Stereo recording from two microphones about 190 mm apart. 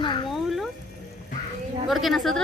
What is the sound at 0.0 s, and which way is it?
Music, 25° left (ahead or behind).